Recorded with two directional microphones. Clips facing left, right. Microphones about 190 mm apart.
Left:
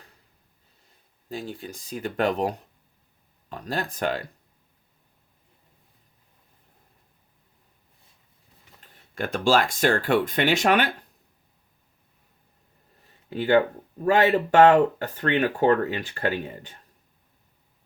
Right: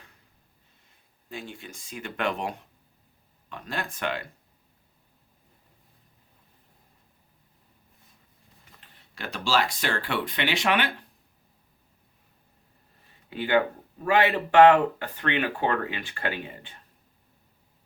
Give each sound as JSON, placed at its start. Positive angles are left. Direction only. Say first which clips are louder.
{"t": 1.3, "sound": "speech", "louder": "left 5 dB", "side_deg": 35}
{"t": 8.8, "sound": "speech", "louder": "left 8 dB", "side_deg": 50}
{"t": 13.3, "sound": "speech", "louder": "left 4 dB", "side_deg": 40}